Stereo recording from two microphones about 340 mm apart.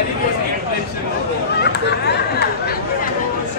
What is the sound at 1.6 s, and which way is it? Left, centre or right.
Chatter, left.